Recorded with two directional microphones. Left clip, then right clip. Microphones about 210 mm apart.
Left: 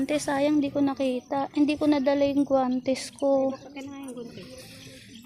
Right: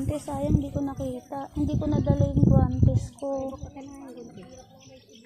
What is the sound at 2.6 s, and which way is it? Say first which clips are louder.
Speech: left 4 dB; 35° left (ahead or behind).